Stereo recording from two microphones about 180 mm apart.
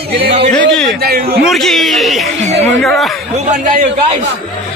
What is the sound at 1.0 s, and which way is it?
Speech, 60° right (ahead or behind).